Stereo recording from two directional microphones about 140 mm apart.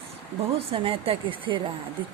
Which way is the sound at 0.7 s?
40° right (ahead or behind).